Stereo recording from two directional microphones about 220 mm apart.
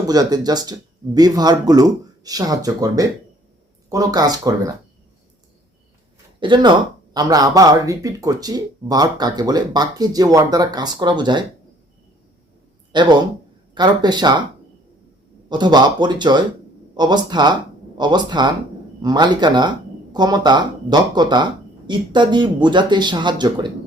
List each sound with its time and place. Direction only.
0.1 s speech: 15° right (ahead or behind)
6.4 s speech: 20° right (ahead or behind)
12.9 s speech: 20° right (ahead or behind)
15.4 s speech: 20° right (ahead or behind)